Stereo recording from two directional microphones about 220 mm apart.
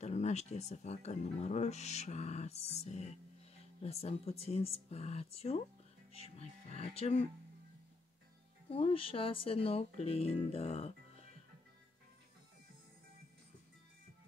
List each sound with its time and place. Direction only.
0.0 s speech: 30° left (ahead or behind)
8.6 s speech: 25° left (ahead or behind)